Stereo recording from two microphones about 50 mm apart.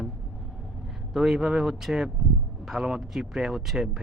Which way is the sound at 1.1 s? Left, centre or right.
Centre.